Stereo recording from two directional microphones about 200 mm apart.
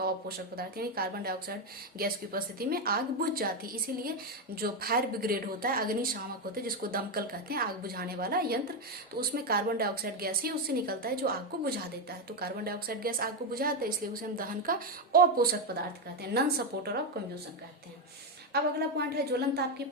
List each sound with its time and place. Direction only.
0.0 s a woman's voice: 50° right (ahead or behind)
18.5 s a woman's voice: 50° right (ahead or behind)